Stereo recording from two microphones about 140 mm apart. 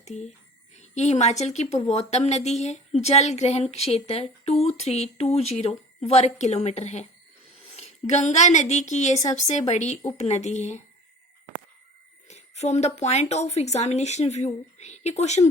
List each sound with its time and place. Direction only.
0.0 s a woman's voice: 55° left (ahead or behind)
12.3 s speech: 55° left (ahead or behind)